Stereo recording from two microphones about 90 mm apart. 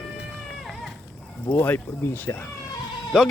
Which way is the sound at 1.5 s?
20° left (ahead or behind).